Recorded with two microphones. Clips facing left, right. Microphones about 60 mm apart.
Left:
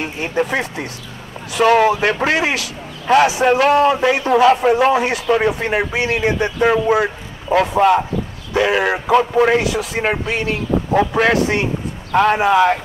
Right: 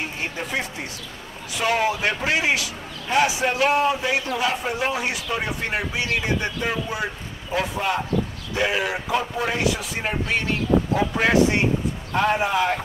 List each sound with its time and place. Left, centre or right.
0.0 s a man's voice: left